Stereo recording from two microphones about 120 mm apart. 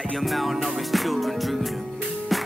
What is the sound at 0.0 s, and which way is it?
Music, centre (ahead or behind).